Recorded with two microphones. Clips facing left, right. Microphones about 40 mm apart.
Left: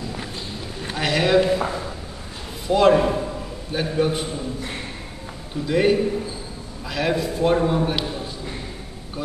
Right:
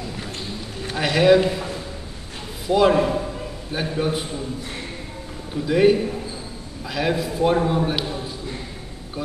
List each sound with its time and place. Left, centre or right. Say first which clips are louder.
0.8 s a man's voice: right 5 dB; centre
2.7 s a man's voice: left 1 dB; centre
5.7 s a man's voice: right 2 dB; centre